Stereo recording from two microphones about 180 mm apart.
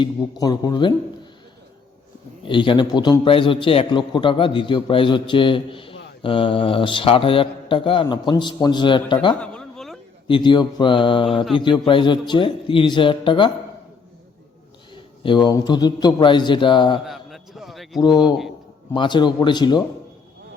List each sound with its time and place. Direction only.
0.0 s a man's voice: 20° left (ahead or behind)
2.4 s a man's voice: 25° left (ahead or behind)
9.4 s a sound: 5° left (ahead or behind)
10.2 s a man's voice: 25° left (ahead or behind)
15.2 s a man's voice: 25° left (ahead or behind)
17.1 s a sound: centre (ahead or behind)
18.9 s a man's voice: 25° left (ahead or behind)